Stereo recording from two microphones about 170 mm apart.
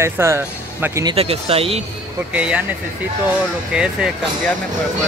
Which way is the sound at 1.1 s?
35° right (ahead or behind).